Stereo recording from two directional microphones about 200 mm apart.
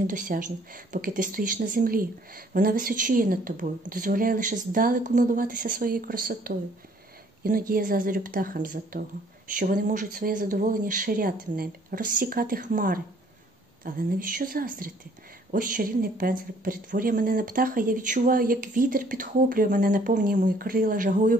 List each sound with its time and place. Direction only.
0.0 s speech: 40° right (ahead or behind)